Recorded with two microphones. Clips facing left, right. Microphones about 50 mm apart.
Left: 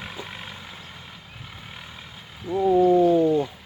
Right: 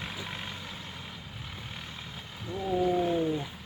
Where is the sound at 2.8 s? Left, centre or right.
Left.